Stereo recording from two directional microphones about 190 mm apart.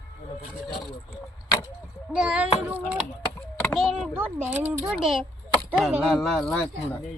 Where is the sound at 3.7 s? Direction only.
Centre (ahead or behind).